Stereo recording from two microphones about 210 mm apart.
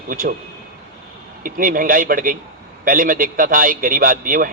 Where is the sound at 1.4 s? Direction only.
40° right (ahead or behind).